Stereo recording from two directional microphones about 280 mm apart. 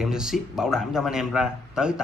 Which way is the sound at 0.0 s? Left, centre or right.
Centre.